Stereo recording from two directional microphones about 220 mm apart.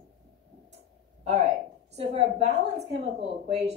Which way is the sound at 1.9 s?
30° right (ahead or behind).